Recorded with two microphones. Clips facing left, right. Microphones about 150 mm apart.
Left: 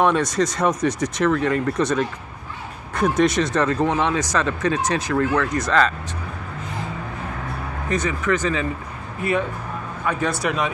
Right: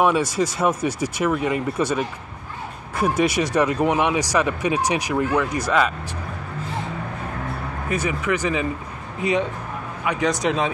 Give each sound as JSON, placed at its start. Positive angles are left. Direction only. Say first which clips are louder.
{"t": 0.0, "sound": "speech", "louder": "even", "side_deg": -5}
{"t": 7.9, "sound": "speech", "louder": "left 1 dB", "side_deg": -10}
{"t": 10.0, "sound": "speech", "louder": "right 2 dB", "side_deg": -15}